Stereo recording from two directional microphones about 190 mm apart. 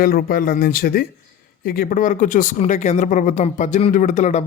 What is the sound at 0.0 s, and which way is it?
Speech, 50° left (ahead or behind).